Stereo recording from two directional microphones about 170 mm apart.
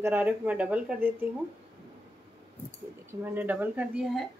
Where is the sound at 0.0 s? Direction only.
10° right (ahead or behind).